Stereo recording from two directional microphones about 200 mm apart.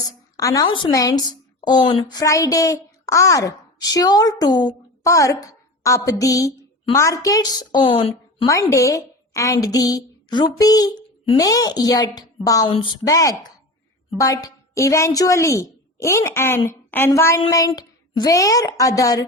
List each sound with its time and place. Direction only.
0.0 s a woman's voice: 15° left (ahead or behind)